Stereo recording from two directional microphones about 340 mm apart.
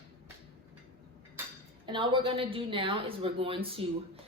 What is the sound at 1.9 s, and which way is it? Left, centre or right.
A woman's voice, centre.